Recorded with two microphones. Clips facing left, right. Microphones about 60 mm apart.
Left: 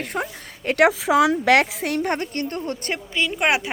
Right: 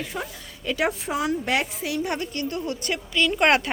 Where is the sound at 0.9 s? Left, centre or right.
Left.